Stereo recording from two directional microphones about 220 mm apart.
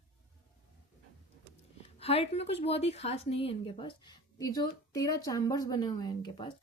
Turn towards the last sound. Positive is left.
turn(degrees=20)  # may be behind; listen again after turning